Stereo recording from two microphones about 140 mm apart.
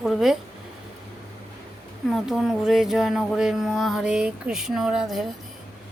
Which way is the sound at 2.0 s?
Centre (ahead or behind).